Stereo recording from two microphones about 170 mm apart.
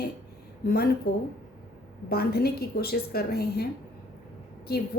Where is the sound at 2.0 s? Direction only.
65° left (ahead or behind).